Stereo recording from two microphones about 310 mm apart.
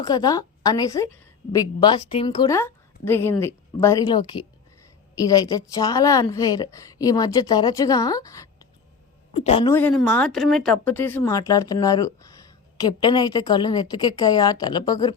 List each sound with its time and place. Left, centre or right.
0.0 s a woman's voice: centre
9.7 s a woman's voice: centre